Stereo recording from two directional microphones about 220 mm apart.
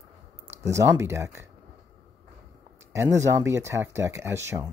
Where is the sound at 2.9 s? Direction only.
15° right (ahead or behind).